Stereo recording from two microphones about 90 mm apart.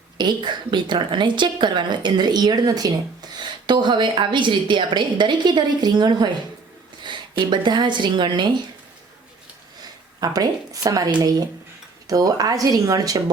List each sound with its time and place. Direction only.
0.2 s a woman's voice: 55° right (ahead or behind)
10.2 s speech: 45° right (ahead or behind)